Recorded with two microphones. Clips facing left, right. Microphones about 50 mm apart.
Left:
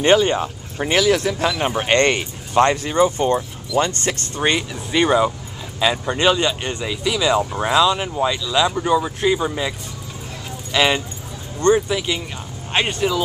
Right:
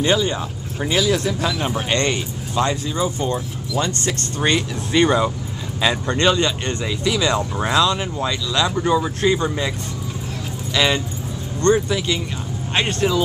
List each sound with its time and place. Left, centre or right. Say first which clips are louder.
0.0 s speech: left 4 dB; left
4.4 s speech: right 1 dB; centre